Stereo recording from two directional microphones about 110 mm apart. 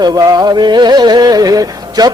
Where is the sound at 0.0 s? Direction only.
35° right (ahead or behind).